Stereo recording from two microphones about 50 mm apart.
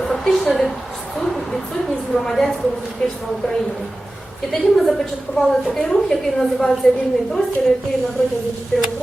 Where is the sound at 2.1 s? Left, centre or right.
Centre.